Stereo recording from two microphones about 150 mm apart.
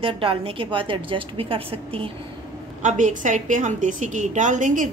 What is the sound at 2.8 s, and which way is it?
A woman's voice, 55° right (ahead or behind).